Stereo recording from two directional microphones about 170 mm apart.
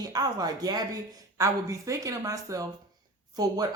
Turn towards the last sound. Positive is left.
turn(degrees=-20)  # may be behind; listen again after turning